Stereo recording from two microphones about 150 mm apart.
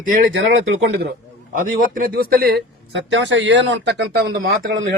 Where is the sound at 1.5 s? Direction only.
65° right (ahead or behind); by 2.7 s 90° right.